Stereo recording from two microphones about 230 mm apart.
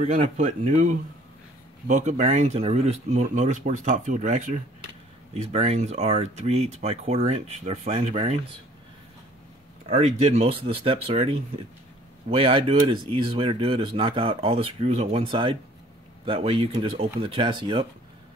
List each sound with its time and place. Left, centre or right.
0.0 s speech: right
9.8 s speech: right